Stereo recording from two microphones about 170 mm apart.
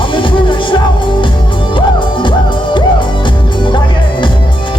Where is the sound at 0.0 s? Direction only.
30° left (ahead or behind).